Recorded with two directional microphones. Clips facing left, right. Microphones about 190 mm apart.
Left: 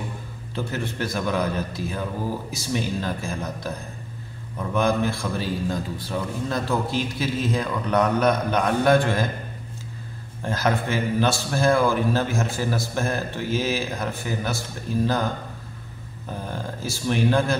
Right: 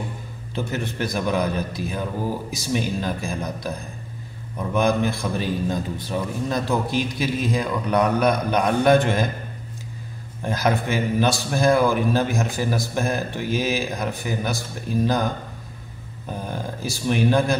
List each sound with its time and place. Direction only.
0.7 s a man's voice: 15° right (ahead or behind)
10.4 s a man's voice: 15° right (ahead or behind)
16.4 s a man's voice: 15° right (ahead or behind)